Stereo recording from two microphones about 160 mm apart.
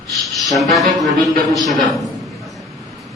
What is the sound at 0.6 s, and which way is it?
A man's voice, centre (ahead or behind).